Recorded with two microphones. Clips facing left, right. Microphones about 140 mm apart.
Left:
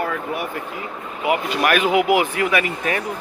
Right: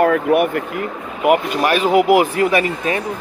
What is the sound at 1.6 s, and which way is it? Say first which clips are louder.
Speech: right 2 dB; 30° right (ahead or behind).